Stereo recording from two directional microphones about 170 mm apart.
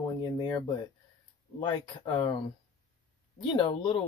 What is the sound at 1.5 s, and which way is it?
Speech, 30° left (ahead or behind).